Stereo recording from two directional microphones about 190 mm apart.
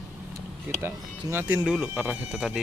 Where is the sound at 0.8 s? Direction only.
10° right (ahead or behind).